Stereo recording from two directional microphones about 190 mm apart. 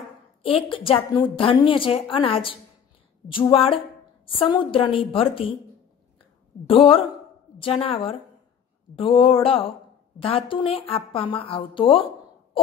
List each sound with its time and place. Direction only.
0.4 s a woman's voice: 30° left (ahead or behind)
6.7 s a woman's voice: 30° left (ahead or behind)